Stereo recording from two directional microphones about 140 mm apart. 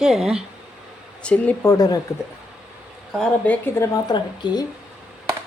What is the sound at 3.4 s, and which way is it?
Speech, 10° left (ahead or behind).